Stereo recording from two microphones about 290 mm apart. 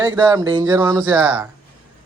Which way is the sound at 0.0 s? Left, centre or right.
Centre.